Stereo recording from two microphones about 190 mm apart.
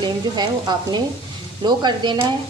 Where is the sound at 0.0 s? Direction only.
20° right (ahead or behind).